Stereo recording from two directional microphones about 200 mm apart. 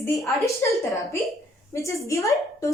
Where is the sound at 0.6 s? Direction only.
15° left (ahead or behind).